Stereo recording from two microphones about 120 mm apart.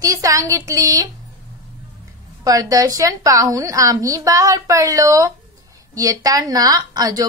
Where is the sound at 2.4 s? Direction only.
30° right (ahead or behind).